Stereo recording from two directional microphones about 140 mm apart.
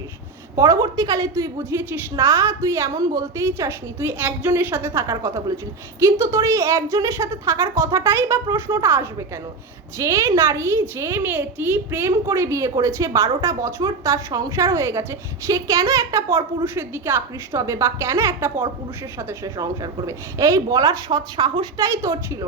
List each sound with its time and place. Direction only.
0.5 s a woman's voice: 25° right (ahead or behind)
19.5 s a woman's voice: 25° right (ahead or behind)